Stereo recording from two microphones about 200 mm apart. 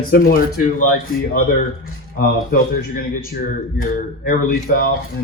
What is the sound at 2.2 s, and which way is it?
A man's voice, 45° left (ahead or behind).